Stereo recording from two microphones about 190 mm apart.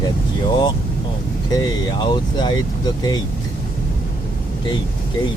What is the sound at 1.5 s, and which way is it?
Speech, 20° left (ahead or behind).